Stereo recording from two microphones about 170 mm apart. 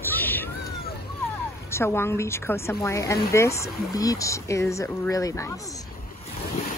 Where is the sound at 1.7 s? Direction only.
15° left (ahead or behind).